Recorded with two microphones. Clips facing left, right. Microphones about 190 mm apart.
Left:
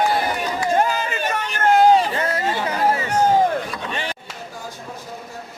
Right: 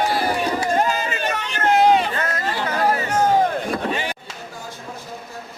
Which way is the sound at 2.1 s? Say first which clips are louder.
Left 3 dB; 25° left (ahead or behind).